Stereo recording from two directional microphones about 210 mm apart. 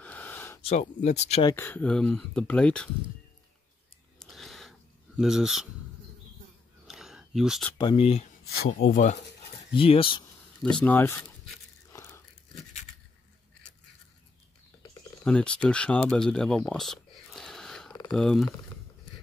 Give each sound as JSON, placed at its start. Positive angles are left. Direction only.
{"t": 0.0, "sound": "a sound", "side_deg": 10}
{"t": 0.6, "sound": "speech", "side_deg": 30}
{"t": 1.5, "sound": "speech", "side_deg": 10}
{"t": 4.2, "sound": "a sound", "side_deg": 0}
{"t": 6.9, "sound": "a sound", "side_deg": 0}
{"t": 7.7, "sound": "speech", "side_deg": 20}
{"t": 8.7, "sound": "speech", "side_deg": 40}
{"t": 9.8, "sound": "speech", "side_deg": 25}
{"t": 10.6, "sound": "speech", "side_deg": 5}
{"t": 11.9, "sound": "biting", "side_deg": 15}
{"t": 15.2, "sound": "speech", "side_deg": 5}